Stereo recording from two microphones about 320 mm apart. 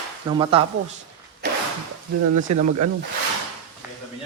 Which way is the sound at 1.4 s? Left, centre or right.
Right.